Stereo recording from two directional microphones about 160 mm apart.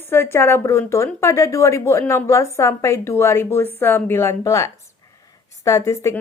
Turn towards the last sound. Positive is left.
turn(degrees=20)  # may be behind; listen again after turning